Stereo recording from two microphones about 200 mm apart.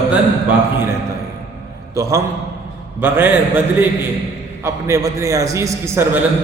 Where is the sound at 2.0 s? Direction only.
15° right (ahead or behind).